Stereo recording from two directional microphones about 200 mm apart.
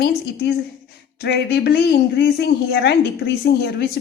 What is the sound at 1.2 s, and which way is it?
A woman's voice, 55° left (ahead or behind).